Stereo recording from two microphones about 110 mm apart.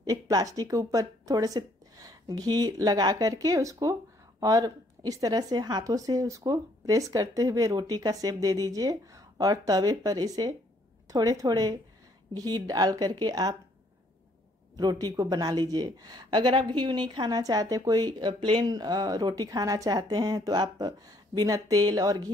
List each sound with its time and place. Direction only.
0.0 s speech: 35° right (ahead or behind)
14.8 s speech: 40° right (ahead or behind)